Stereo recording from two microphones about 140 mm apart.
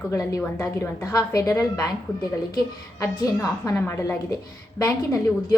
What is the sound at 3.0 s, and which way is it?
A woman's voice, 25° left (ahead or behind).